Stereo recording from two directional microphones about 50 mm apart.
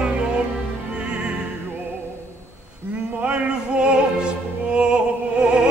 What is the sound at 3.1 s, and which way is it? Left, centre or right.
Opera, right.